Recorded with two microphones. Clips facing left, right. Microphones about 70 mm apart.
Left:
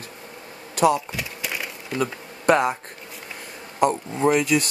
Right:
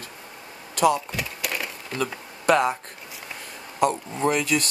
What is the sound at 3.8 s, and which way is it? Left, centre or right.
Speech, centre.